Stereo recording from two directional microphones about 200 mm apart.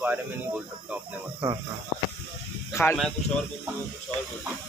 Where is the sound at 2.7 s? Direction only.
10° left (ahead or behind).